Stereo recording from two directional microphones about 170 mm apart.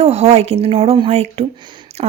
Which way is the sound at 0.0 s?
35° right (ahead or behind).